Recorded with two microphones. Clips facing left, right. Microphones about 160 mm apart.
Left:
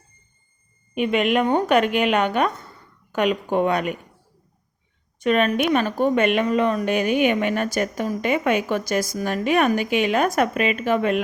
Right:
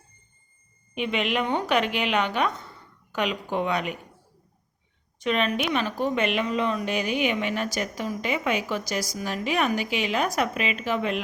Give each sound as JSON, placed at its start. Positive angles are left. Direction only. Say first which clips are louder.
{"t": 0.9, "sound": "speech", "louder": "left 6 dB", "side_deg": 50}
{"t": 5.2, "sound": "speech", "louder": "left 6 dB", "side_deg": 50}